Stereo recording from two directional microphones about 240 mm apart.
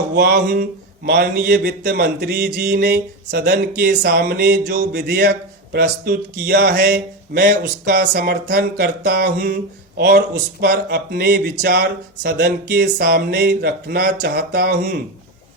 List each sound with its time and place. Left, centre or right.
0.2 s speech: right